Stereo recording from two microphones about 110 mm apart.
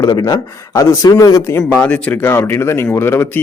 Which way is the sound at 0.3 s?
30° left (ahead or behind).